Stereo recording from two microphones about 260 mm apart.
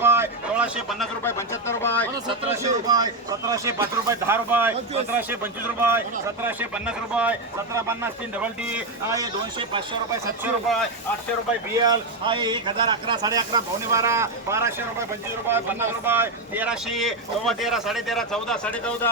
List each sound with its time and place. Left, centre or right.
0.0 s speech: centre
2.8 s a man's voice: centre
10.4 s speech: centre
11.8 s a man's voice: centre